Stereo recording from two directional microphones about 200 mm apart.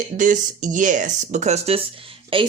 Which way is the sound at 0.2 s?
40° right (ahead or behind).